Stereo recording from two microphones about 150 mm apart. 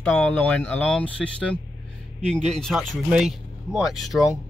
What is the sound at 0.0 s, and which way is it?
Speech, 15° left (ahead or behind).